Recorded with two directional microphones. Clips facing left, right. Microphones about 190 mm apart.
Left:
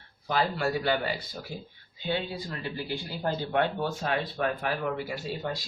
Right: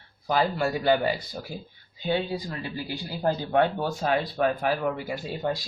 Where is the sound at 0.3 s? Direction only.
45° right (ahead or behind).